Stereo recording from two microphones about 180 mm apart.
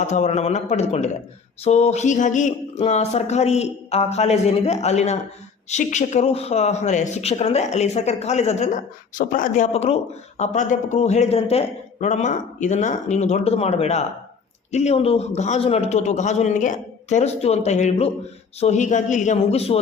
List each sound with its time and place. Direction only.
0.0 s speech: 40° left (ahead or behind)
9.7 s a man's voice: 35° left (ahead or behind)